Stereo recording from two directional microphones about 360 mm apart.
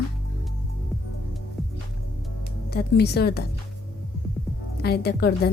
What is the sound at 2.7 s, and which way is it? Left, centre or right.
Speech, left.